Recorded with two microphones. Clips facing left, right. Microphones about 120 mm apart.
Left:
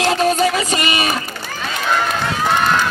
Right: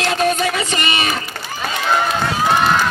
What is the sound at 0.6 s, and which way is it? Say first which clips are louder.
Speech: left 2 dB; 30° right (ahead or behind).